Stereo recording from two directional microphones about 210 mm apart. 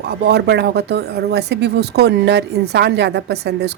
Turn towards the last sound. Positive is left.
turn(degrees=-50)  # may be behind; listen again after turning